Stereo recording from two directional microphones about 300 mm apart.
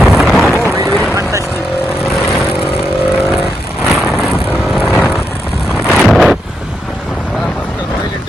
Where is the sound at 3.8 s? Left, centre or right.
Centre.